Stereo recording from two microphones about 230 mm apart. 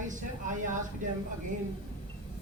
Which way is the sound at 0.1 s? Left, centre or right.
Right.